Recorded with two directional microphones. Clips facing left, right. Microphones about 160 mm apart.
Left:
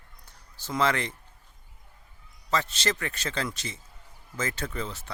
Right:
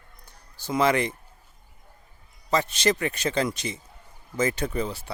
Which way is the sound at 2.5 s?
15° right (ahead or behind).